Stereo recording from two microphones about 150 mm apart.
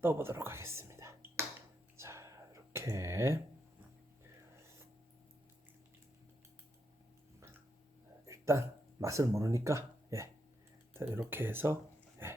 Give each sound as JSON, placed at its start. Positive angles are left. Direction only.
{"t": 0.0, "sound": "whispering", "side_deg": -15}
{"t": 8.3, "sound": "speech", "side_deg": -20}
{"t": 12.2, "sound": "dog", "side_deg": -15}